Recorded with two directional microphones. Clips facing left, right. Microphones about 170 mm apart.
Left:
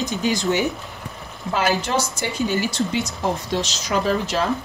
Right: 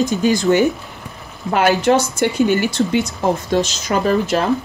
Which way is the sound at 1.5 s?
60° right (ahead or behind).